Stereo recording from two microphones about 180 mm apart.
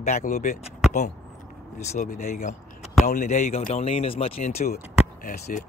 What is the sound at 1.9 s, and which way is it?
Speech, 40° left (ahead or behind).